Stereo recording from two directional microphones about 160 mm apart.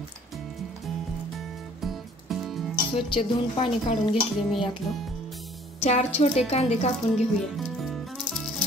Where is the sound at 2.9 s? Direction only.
35° left (ahead or behind).